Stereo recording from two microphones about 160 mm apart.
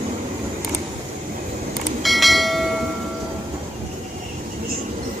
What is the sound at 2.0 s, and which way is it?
Bell, centre (ahead or behind).